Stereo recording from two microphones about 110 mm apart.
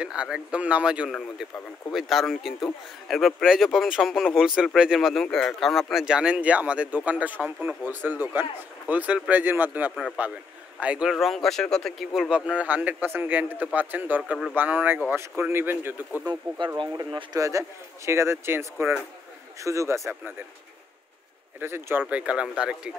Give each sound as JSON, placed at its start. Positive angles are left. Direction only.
{"t": 0.0, "sound": "a man's voice", "side_deg": -10}
{"t": 16.3, "sound": "a man's voice", "side_deg": -45}
{"t": 21.5, "sound": "a man's voice", "side_deg": -20}
{"t": 22.1, "sound": "speech", "side_deg": -10}